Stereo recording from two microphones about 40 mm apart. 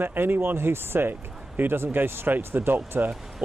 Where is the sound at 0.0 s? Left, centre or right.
Right.